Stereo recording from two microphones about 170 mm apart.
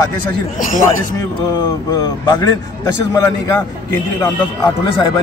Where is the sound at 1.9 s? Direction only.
25° left (ahead or behind).